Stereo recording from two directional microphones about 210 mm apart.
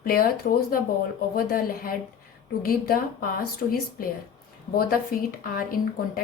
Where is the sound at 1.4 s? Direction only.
45° left (ahead or behind).